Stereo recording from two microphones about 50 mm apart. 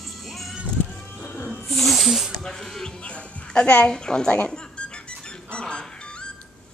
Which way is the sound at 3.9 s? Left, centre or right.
Centre.